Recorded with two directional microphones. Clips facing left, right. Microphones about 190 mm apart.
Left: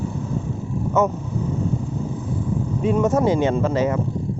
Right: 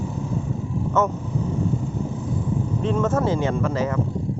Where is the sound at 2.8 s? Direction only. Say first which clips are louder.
Left 4 dB; 10° left (ahead or behind).